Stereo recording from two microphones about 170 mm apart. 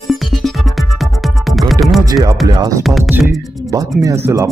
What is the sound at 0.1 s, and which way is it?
Music, centre (ahead or behind).